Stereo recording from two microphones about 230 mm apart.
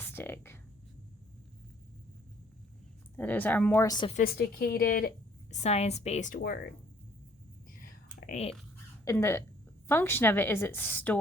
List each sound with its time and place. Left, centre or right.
0.0 s a sound: centre
3.2 s a woman's voice: centre
4.2 s a woman's voice: left
7.8 s whispering: left
9.0 s a woman's voice: centre